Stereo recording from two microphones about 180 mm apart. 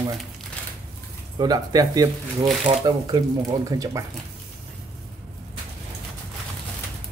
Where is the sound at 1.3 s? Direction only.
20° right (ahead or behind).